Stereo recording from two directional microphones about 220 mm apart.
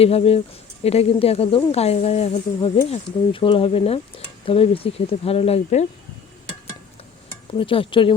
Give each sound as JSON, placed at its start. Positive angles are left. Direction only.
{"t": 0.0, "sound": "speech", "side_deg": 25}
{"t": 7.6, "sound": "speech", "side_deg": 25}